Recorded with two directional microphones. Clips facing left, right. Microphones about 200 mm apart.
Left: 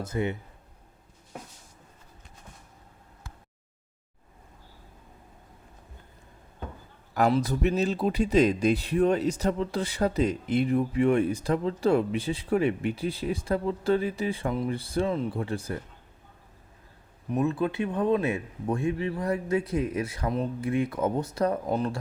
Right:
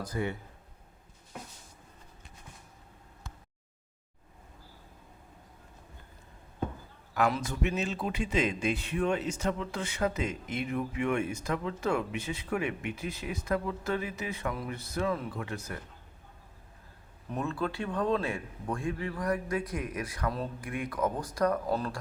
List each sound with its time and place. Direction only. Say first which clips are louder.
0.0 s speech: left 4 dB; 20° left (ahead or behind)
7.1 s speech: left 5 dB; 35° left (ahead or behind)
17.3 s speech: left 7 dB; 20° left (ahead or behind)